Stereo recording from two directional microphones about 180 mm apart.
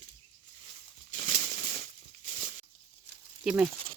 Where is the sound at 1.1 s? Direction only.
60° right (ahead or behind).